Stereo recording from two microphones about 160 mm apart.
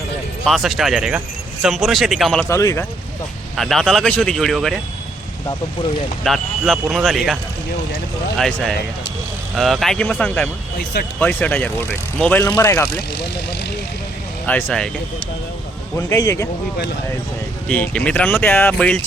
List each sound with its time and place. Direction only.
0.4 s speech: centre (ahead or behind)
2.5 s speech: 20° left (ahead or behind)
3.6 s speech: centre (ahead or behind)
6.2 s speech: centre (ahead or behind)
8.4 s speech: 5° left (ahead or behind)
14.4 s speech: 5° left (ahead or behind)
16.0 s speech: 20° left (ahead or behind)
17.7 s speech: 10° left (ahead or behind)